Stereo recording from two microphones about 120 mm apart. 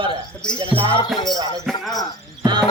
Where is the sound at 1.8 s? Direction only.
Centre (ahead or behind).